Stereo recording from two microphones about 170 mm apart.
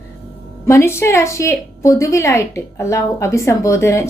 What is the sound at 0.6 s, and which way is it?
A woman's voice, 15° left (ahead or behind).